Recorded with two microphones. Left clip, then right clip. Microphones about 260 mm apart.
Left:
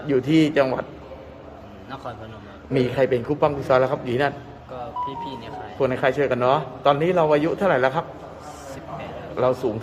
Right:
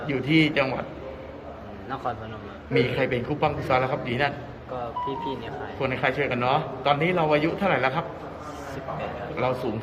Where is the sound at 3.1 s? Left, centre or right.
Left.